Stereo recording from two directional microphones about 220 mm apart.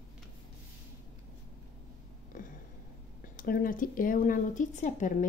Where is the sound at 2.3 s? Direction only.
35° left (ahead or behind).